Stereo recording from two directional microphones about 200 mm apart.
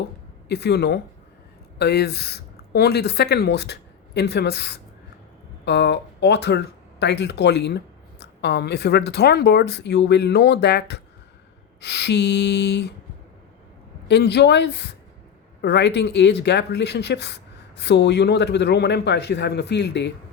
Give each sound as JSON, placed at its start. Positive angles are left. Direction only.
{"t": 0.4, "sound": "speech", "side_deg": 55}
{"t": 14.1, "sound": "speech", "side_deg": 55}